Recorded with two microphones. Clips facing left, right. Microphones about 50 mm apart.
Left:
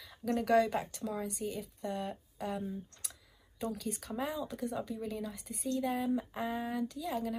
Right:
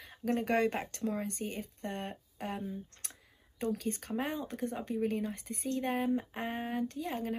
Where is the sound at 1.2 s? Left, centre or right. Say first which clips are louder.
Even; right.